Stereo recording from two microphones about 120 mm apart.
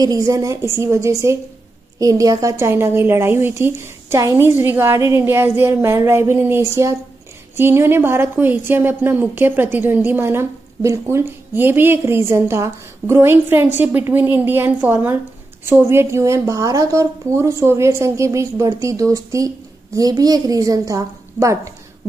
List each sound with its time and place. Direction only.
0.0 s a woman's voice: 30° right (ahead or behind)